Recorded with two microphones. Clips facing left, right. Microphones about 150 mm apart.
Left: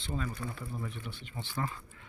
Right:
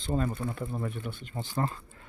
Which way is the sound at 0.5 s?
55° right (ahead or behind).